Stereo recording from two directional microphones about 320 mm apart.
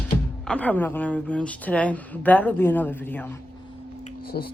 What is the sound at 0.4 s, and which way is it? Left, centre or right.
A woman's voice, centre.